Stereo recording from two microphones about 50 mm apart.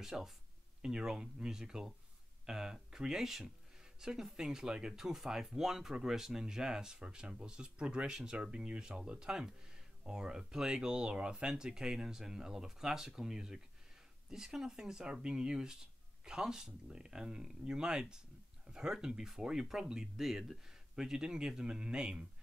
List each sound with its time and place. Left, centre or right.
0.0 s speech: centre